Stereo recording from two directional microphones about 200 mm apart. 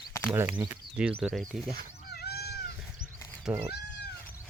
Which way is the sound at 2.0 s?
55° left (ahead or behind).